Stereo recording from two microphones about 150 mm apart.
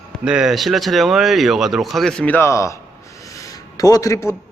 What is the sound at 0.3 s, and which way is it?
Speech, 5° right (ahead or behind).